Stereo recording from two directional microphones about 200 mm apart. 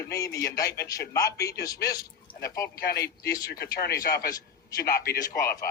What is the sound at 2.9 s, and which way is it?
Speech, 50° left (ahead or behind).